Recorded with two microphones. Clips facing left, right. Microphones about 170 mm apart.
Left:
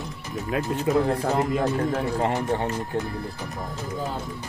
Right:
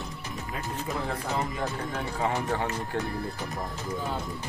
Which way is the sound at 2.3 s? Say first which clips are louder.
Left 4 dB; 15° left (ahead or behind).